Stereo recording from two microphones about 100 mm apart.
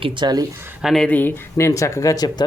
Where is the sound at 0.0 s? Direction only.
50° right (ahead or behind).